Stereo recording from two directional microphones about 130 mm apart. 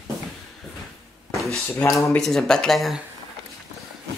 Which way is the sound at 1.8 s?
25° left (ahead or behind).